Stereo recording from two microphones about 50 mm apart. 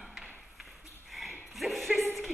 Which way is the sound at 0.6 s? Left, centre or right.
Centre.